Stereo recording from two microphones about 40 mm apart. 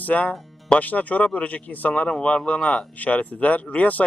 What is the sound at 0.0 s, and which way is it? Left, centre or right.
A man's voice, left.